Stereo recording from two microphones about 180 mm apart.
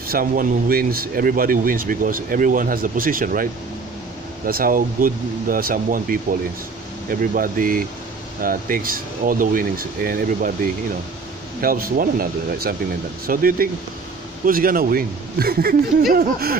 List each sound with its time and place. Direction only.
0.1 s speech: 55° right (ahead or behind)
4.5 s speech: 55° right (ahead or behind)
16.1 s a sound: 55° right (ahead or behind)